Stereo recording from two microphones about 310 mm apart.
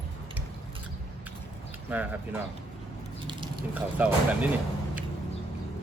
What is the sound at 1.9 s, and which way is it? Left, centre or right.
Speech, centre.